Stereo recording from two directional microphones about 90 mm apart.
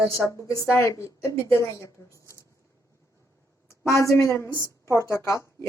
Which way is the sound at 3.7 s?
30° left (ahead or behind).